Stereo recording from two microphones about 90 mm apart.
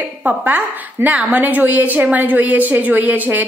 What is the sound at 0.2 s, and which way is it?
A woman's voice, 20° right (ahead or behind).